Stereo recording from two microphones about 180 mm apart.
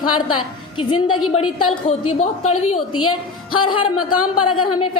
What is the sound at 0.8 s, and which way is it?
A woman's voice, 30° left (ahead or behind).